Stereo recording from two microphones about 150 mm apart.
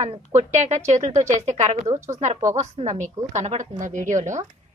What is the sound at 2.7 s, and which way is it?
A woman's voice, 55° right (ahead or behind).